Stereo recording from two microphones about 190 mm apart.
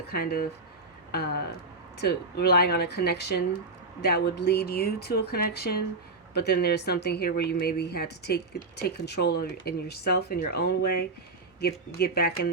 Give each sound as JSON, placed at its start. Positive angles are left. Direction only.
{"t": 0.1, "sound": "speech", "side_deg": 55}
{"t": 2.0, "sound": "speech", "side_deg": 55}